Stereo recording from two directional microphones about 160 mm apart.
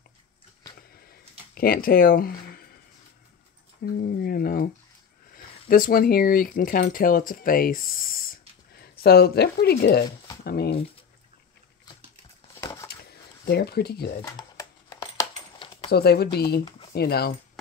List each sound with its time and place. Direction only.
1.5 s speech: 65° left (ahead or behind)
3.8 s speech: 65° left (ahead or behind); by 10.8 s 85° left
12.6 s a sound: 20° left (ahead or behind)
13.5 s speech: 80° left
14.2 s a sound: 25° left (ahead or behind)
15.9 s speech: 90° left